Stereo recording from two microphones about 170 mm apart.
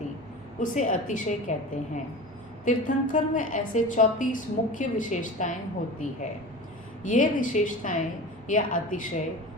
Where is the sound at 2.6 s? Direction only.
50° left (ahead or behind).